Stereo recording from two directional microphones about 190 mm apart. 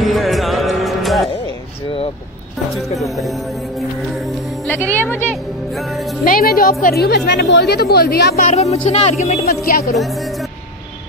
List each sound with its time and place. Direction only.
0.0 s music: centre (ahead or behind)
3.0 s music: centre (ahead or behind)
4.6 s speech: 10° left (ahead or behind)
6.2 s a woman's voice: 50° left (ahead or behind)
8.5 s speech: 35° left (ahead or behind)
9.7 s speech: 50° left (ahead or behind)